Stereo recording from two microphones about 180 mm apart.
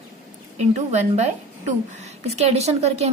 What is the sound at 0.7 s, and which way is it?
A woman's voice, 40° right (ahead or behind).